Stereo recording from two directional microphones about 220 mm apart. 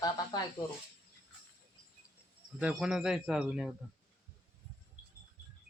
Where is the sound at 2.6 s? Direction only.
5° right (ahead or behind).